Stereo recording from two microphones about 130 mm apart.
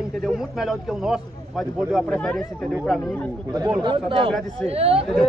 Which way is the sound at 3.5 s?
35° right (ahead or behind).